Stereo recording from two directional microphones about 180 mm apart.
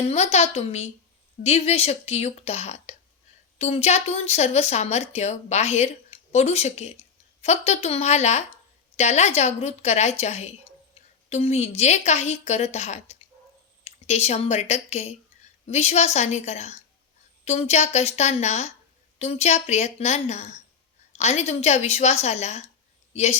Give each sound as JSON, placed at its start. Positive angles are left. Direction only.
{"t": 0.1, "sound": "speech", "side_deg": 40}